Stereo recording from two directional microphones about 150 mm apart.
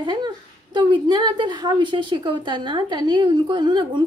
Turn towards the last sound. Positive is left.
turn(degrees=-30)  # may be behind; listen again after turning